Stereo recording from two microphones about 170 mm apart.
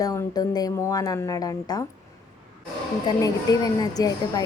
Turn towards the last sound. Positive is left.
turn(degrees=20)  # may be behind; listen again after turning